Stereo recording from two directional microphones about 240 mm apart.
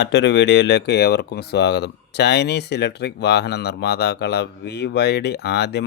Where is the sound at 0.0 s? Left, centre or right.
Left.